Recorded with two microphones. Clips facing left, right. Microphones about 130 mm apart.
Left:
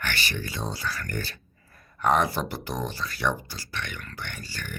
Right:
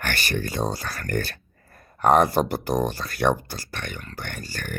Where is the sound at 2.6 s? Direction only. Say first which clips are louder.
Right 7 dB; 50° right (ahead or behind).